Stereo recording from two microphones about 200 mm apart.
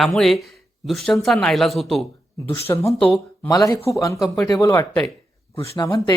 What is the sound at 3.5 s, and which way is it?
Speech, 15° left (ahead or behind).